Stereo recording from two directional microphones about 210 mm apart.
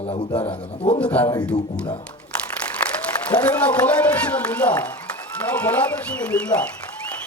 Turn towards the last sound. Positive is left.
turn(degrees=5)  # may be behind; listen again after turning